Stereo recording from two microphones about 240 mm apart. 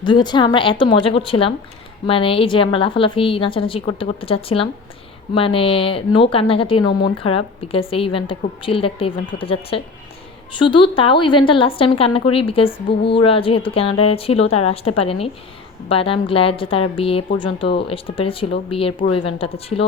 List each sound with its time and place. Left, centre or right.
0.0 s a woman's voice: centre